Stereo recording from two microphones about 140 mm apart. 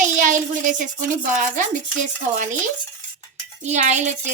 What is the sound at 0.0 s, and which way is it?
A child's voice, 65° right (ahead or behind).